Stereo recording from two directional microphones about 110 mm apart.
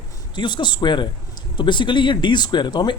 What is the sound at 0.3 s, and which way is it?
Speech, 45° left (ahead or behind).